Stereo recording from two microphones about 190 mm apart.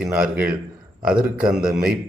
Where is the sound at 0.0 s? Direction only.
5° right (ahead or behind).